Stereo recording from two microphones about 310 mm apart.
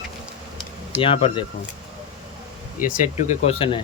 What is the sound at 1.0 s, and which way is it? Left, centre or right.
Speech, centre.